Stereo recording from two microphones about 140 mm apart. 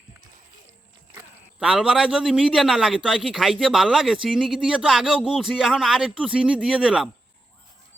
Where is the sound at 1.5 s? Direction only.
5° right (ahead or behind).